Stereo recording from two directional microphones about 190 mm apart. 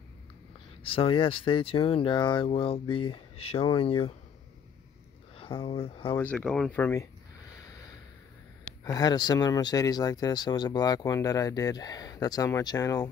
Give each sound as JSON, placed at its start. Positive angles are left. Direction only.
{"t": 0.8, "sound": "speech", "side_deg": 30}
{"t": 5.4, "sound": "speech", "side_deg": 30}
{"t": 6.1, "sound": "speech", "side_deg": 10}
{"t": 8.8, "sound": "speech", "side_deg": 20}